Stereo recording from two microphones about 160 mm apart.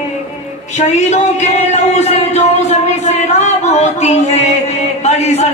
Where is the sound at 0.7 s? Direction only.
45° left (ahead or behind).